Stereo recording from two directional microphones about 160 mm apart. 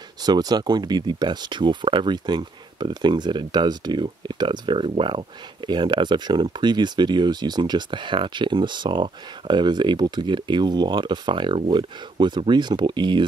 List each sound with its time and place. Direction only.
0.2 s speech: 25° right (ahead or behind)